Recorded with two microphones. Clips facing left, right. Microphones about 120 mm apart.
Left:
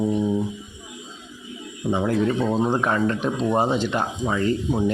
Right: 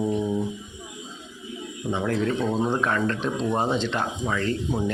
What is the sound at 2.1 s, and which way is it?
Speech, 10° left (ahead or behind).